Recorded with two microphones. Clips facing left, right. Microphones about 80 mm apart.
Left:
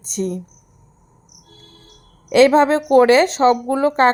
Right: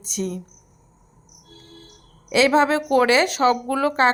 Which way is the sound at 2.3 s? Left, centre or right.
Left.